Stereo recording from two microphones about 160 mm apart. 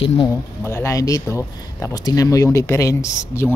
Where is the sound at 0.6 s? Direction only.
15° left (ahead or behind).